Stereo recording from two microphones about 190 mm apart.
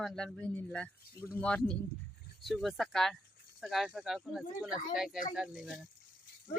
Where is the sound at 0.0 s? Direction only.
5° left (ahead or behind).